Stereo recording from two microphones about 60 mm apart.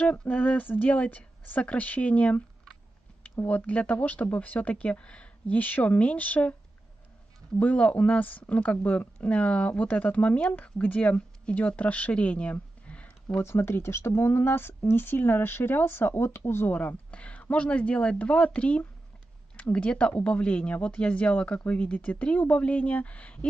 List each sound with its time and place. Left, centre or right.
0.0 s speech: left
3.4 s speech: left
7.5 s speech: left
12.8 s a sound: left
13.4 s speech: left
16.7 s speech: left